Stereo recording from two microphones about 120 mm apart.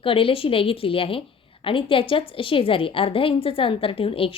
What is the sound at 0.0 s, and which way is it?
A woman's voice, 50° left (ahead or behind).